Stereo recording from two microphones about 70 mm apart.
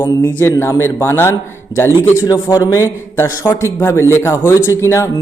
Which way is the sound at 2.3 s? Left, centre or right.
Left.